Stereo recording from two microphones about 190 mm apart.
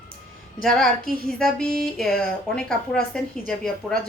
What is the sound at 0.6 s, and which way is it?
Speech, centre (ahead or behind).